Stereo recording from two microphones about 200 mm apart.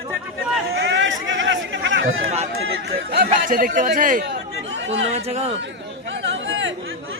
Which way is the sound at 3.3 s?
40° right (ahead or behind).